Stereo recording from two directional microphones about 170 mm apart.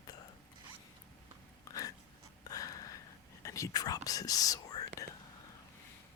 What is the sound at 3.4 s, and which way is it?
Whispering, 20° left (ahead or behind).